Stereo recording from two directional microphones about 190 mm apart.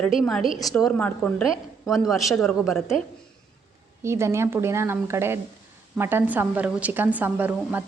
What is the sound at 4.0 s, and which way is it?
A woman's voice, 15° right (ahead or behind).